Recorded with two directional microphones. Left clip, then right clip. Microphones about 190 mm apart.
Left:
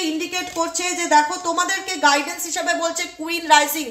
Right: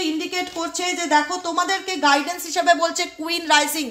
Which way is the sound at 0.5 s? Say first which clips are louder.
Left 2 dB; 30° right (ahead or behind).